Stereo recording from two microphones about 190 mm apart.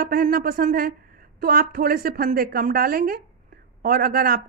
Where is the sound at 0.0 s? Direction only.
50° right (ahead or behind).